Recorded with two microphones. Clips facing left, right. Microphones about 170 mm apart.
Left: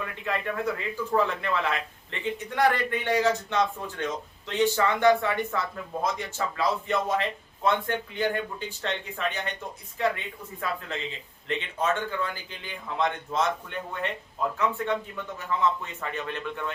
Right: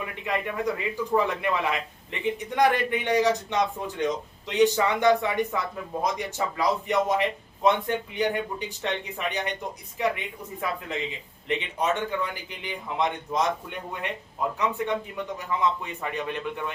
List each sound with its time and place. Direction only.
0.0 s a man's voice: 15° right (ahead or behind)